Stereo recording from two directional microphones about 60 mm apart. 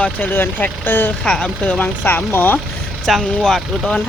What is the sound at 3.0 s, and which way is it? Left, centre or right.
Speech, centre.